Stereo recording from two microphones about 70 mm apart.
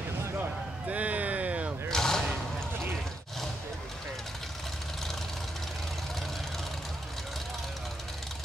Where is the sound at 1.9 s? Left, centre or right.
Centre.